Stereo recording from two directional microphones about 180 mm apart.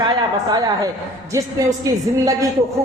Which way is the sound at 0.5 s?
20° right (ahead or behind).